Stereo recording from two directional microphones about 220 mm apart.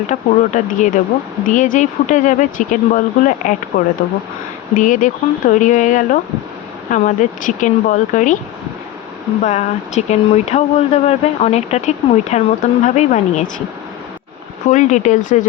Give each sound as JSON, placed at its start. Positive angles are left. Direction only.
{"t": 0.1, "sound": "speech", "side_deg": 35}
{"t": 9.4, "sound": "speech", "side_deg": 30}
{"t": 14.7, "sound": "speech", "side_deg": 35}